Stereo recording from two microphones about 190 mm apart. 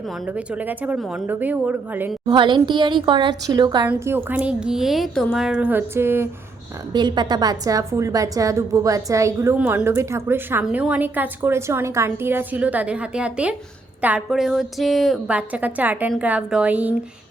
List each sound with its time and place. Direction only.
0.3 s a woman's voice: 5° right (ahead or behind)
2.3 s a woman's voice: 25° right (ahead or behind); by 16.9 s 10° right (ahead or behind)